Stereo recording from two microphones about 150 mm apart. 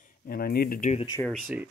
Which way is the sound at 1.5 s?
10° right (ahead or behind).